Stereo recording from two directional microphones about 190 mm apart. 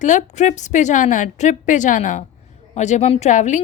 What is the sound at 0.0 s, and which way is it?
A woman's voice, 40° left (ahead or behind).